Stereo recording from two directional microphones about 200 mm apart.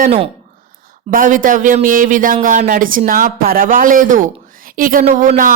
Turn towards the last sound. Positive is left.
turn(degrees=-40)  # may be behind; listen again after turning